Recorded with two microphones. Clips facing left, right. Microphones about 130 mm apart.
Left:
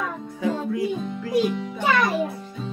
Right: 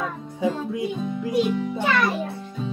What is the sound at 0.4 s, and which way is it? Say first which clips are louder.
Music: even; 20° right (ahead or behind).